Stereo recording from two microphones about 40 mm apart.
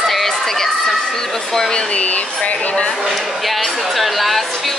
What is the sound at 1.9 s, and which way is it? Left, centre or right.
Speech, left.